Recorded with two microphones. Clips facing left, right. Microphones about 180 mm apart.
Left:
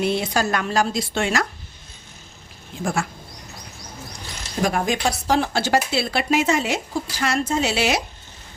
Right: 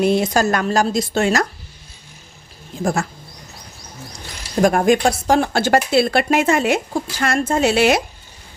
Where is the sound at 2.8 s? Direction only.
40° right (ahead or behind).